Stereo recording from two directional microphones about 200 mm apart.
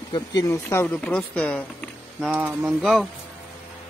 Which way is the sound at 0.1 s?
20° left (ahead or behind).